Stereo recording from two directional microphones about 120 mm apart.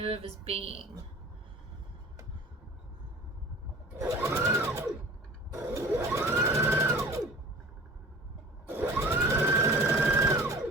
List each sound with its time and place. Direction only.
0.0 s a sound: 50° right (ahead or behind)
3.9 s sewing machine: 25° right (ahead or behind)
8.6 s sewing machine: 20° right (ahead or behind)